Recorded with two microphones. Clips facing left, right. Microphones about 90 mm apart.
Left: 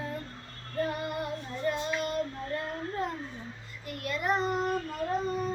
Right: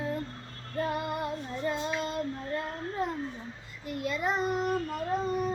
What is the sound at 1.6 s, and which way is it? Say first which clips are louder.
Child singing: left 1 dB; 25° right (ahead or behind).